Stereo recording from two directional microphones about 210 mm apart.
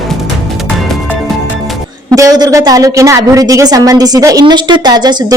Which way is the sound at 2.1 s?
15° right (ahead or behind).